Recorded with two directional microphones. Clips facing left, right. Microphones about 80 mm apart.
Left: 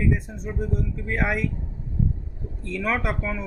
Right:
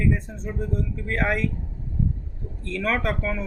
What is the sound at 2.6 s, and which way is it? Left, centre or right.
Speech, centre.